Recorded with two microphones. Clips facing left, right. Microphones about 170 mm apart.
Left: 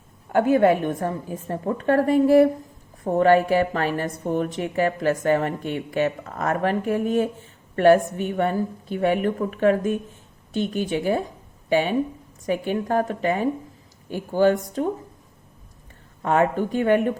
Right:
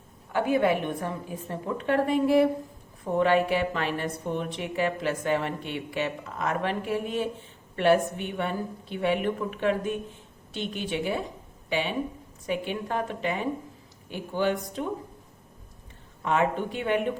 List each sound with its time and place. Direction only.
0.3 s a woman's voice: 45° left (ahead or behind)
16.2 s a woman's voice: 45° left (ahead or behind)